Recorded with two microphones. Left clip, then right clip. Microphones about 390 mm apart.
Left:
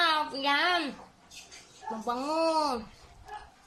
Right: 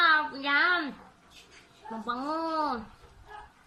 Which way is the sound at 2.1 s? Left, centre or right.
Centre.